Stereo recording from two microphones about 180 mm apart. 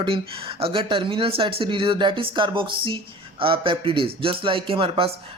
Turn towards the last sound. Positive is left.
turn(degrees=-30)  # may be behind; listen again after turning